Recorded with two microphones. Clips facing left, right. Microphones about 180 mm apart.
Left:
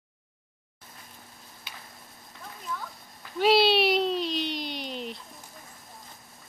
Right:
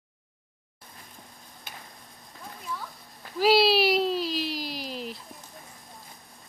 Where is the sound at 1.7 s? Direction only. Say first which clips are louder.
Right 2 dB; 50° right (ahead or behind).